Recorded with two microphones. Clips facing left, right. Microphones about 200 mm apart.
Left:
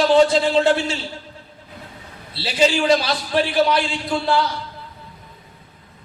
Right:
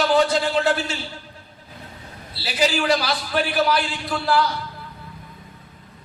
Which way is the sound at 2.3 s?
25° left (ahead or behind).